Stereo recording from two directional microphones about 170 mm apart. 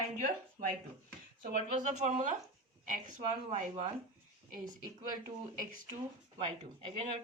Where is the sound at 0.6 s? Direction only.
40° right (ahead or behind).